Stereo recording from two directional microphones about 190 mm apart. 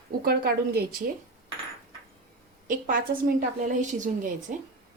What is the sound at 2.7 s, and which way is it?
Speech, 45° right (ahead or behind).